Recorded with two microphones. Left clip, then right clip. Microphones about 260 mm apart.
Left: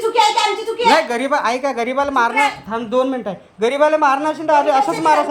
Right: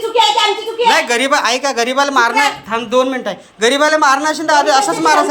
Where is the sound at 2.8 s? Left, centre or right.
Left.